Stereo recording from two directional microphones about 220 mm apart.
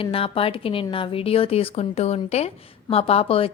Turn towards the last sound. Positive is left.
turn(degrees=25)  # may be behind; listen again after turning